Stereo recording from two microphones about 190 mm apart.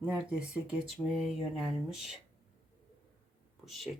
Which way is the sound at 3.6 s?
Centre (ahead or behind).